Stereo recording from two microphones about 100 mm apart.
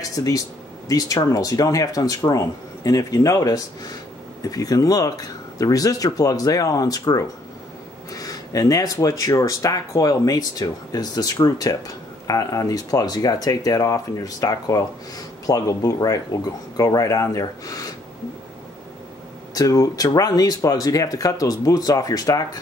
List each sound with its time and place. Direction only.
0.1 s speech: 35° left (ahead or behind)
19.5 s speech: 35° left (ahead or behind)